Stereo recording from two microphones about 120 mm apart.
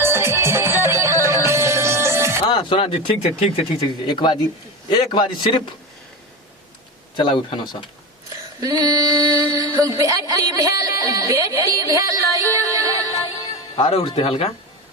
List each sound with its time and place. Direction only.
0.0 s music: 20° right (ahead or behind)
2.5 s a man's voice: 45° left (ahead or behind)
7.2 s speech: 45° left (ahead or behind)
8.6 s a sound: 30° right (ahead or behind)
9.6 s speech: 30° right (ahead or behind)
13.7 s speech: 50° left (ahead or behind)